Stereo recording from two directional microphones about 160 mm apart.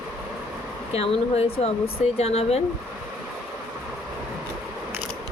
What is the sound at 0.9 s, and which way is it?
Speech, 40° left (ahead or behind).